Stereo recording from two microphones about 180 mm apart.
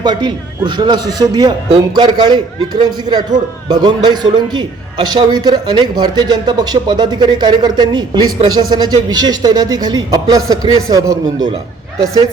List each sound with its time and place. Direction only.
0.0 s a man's voice: 25° right (ahead or behind)